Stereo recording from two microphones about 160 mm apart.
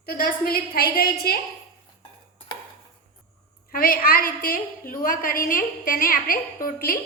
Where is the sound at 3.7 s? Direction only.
60° left (ahead or behind).